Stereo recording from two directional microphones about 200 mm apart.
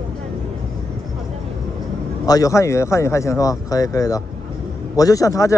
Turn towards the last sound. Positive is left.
turn(degrees=15)  # may be behind; listen again after turning